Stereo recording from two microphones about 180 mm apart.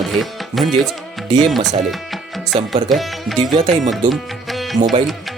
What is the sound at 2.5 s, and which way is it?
Speech, 30° right (ahead or behind).